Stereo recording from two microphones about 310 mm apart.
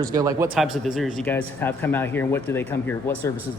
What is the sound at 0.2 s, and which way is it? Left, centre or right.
Speech, centre.